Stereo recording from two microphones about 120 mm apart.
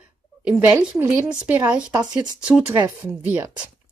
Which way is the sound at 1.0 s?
15° right (ahead or behind).